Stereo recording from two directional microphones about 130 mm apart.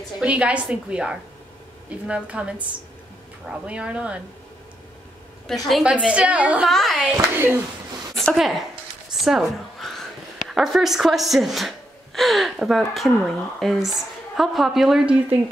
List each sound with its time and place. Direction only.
0.2 s a woman's voice: 10° right (ahead or behind)
5.7 s a woman's voice: 5° right (ahead or behind)
6.7 s a woman's voice: centre (ahead or behind)
7.1 s a woman's voice: 15° right (ahead or behind)
8.3 s a woman's voice: centre (ahead or behind)